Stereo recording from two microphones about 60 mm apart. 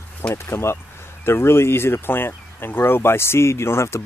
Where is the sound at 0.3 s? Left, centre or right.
Left.